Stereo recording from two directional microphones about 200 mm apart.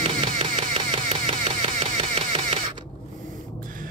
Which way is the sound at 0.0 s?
25° right (ahead or behind).